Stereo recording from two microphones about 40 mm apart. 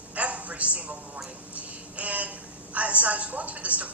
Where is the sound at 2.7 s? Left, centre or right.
Right.